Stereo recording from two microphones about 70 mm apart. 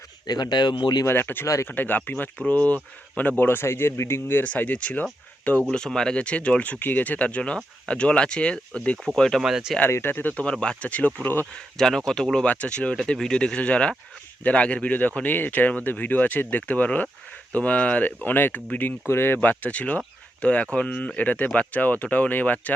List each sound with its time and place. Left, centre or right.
0.3 s speech: left
1.0 s speech: left
4.4 s speech: centre
5.7 s speech: centre
9.4 s speech: centre
9.9 s speech: left
10.3 s speech: centre
11.5 s speech: centre